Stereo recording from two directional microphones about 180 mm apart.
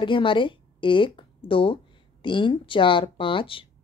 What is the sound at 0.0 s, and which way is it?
Speech, 25° left (ahead or behind).